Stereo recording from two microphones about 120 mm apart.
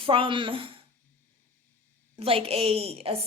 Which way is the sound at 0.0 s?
50° right (ahead or behind).